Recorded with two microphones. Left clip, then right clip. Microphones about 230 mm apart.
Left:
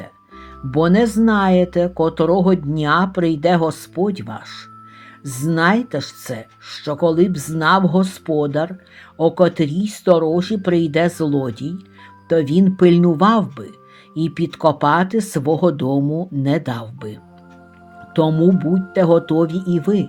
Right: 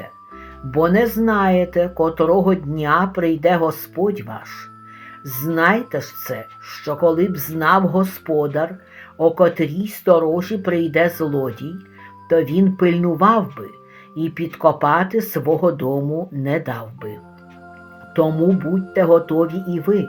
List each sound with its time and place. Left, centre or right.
0.7 s speech: left
18.1 s speech: left